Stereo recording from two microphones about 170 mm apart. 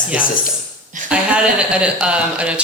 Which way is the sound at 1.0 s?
5° right (ahead or behind).